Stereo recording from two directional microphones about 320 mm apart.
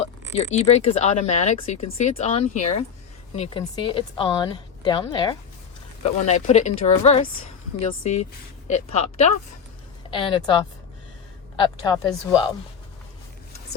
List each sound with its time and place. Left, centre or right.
0.3 s a woman's voice: left